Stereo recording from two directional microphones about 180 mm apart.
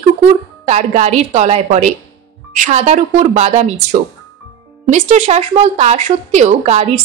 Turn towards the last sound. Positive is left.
turn(degrees=-35)  # may be behind; listen again after turning